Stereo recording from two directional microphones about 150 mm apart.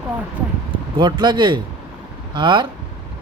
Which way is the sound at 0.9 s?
30° right (ahead or behind).